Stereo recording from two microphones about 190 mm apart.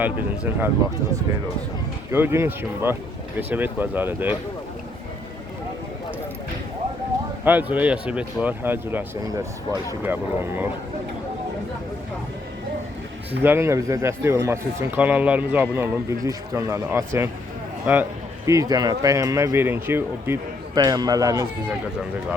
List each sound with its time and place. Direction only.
0.0 s speech: 10° right (ahead or behind)
2.1 s speech: 10° right (ahead or behind)
7.4 s speech: 10° right (ahead or behind)
13.4 s speech: 10° right (ahead or behind)